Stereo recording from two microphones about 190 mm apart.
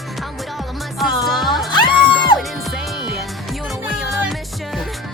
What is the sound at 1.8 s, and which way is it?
Music, centre (ahead or behind).